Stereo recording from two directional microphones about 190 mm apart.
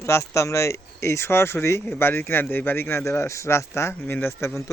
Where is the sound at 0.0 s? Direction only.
15° left (ahead or behind).